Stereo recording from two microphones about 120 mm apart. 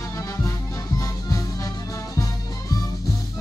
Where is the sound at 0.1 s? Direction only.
30° left (ahead or behind).